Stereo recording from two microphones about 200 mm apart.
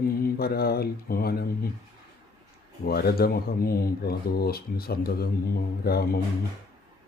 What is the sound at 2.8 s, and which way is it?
Speech, 50° left (ahead or behind).